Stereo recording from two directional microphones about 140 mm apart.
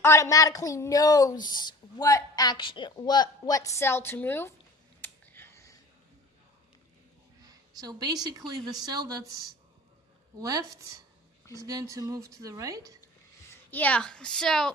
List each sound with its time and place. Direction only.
0.0 s a woman's voice: 20° left (ahead or behind)
4.9 s a sound: 15° left (ahead or behind)
7.4 s a woman's voice: 25° right (ahead or behind)
10.4 s a woman's voice: 25° right (ahead or behind)
13.5 s a woman's voice: 15° left (ahead or behind)